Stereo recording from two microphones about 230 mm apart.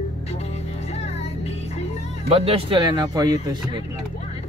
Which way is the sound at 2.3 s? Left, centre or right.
Right.